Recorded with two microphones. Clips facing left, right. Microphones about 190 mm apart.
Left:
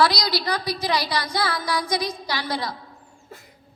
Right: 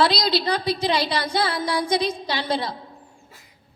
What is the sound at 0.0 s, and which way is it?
A woman's voice, 25° right (ahead or behind).